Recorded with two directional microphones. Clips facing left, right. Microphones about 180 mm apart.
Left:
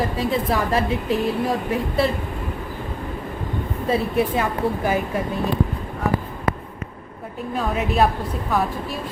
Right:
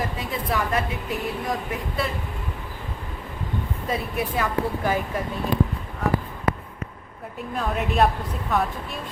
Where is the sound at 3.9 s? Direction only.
25° left (ahead or behind).